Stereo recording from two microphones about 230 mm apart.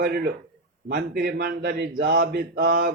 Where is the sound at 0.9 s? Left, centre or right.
Right.